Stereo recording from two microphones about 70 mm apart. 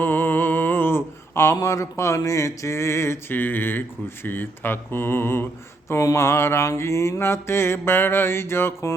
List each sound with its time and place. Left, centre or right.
0.0 s mantra: left
1.6 s speech: left